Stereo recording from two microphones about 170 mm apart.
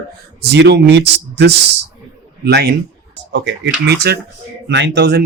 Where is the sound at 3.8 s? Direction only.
70° right (ahead or behind).